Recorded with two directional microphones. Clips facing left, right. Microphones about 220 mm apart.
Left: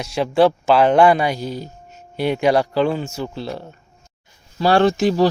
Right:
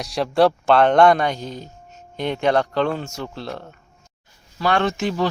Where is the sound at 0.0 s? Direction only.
Centre (ahead or behind).